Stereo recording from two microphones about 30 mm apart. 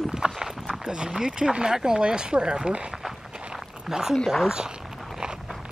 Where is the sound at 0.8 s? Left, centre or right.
Right.